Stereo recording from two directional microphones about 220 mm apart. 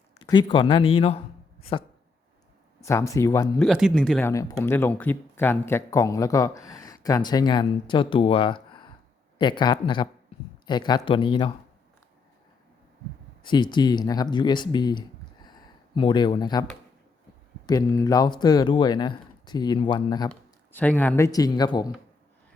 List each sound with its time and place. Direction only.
0.2 s speech: 20° left (ahead or behind)
2.8 s speech: 15° left (ahead or behind)
3.6 s speech: centre (ahead or behind)
4.3 s speech: 15° left (ahead or behind)
13.4 s speech: 20° left (ahead or behind)
17.7 s speech: 15° left (ahead or behind)
20.7 s speech: 10° left (ahead or behind)